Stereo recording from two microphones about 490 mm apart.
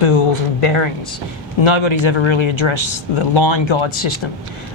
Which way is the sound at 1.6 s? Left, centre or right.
Left.